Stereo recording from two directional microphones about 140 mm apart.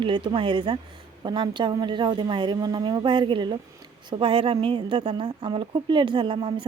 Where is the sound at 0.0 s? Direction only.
35° right (ahead or behind).